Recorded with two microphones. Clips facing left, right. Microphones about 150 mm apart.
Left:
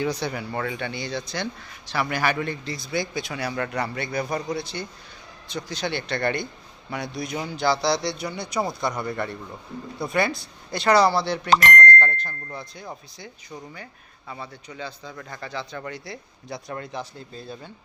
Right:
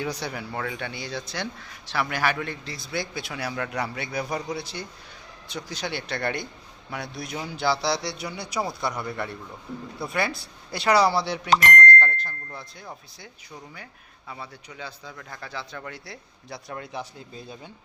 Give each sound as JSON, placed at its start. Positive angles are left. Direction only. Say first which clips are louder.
{"t": 0.0, "sound": "speech", "louder": "left 4 dB", "side_deg": -5}
{"t": 11.4, "sound": "speech", "louder": "left 1 dB", "side_deg": 90}
{"t": 11.8, "sound": "speech", "louder": "left 1 dB", "side_deg": 0}